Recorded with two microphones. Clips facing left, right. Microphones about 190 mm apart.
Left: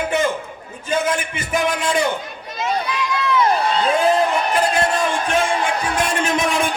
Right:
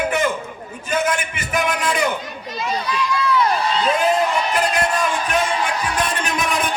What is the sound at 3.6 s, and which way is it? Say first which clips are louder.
Speech: left 2 dB; 55° left (ahead or behind).